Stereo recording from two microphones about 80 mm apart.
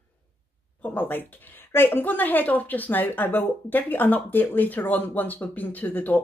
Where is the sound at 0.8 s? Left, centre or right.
Left.